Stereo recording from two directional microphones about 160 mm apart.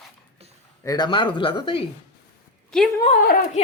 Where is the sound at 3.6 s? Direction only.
40° left (ahead or behind).